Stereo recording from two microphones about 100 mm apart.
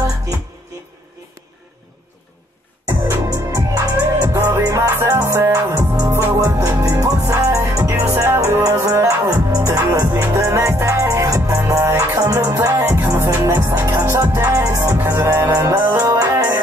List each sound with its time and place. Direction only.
2.9 s music: 25° right (ahead or behind)
12.8 s music: 25° right (ahead or behind)
14.2 s music: 20° right (ahead or behind)
14.5 s music: 35° right (ahead or behind)